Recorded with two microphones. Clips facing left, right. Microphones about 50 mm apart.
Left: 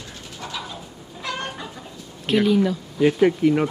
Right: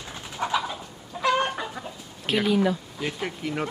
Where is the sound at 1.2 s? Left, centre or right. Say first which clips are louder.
Right 6 dB; centre.